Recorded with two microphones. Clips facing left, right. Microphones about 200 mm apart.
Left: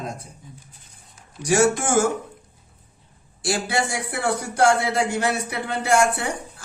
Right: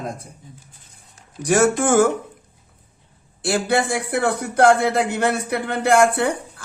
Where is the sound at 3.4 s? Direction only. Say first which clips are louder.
Right 4 dB; 55° right (ahead or behind).